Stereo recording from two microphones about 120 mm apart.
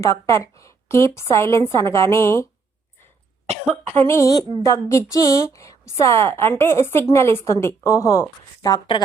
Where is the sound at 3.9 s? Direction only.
20° left (ahead or behind).